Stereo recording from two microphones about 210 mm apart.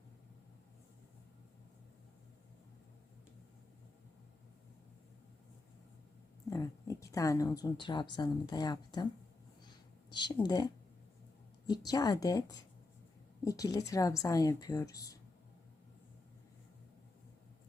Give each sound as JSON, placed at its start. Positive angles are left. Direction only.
{"t": 6.5, "sound": "speech", "side_deg": 15}
{"t": 10.1, "sound": "a woman's voice", "side_deg": 20}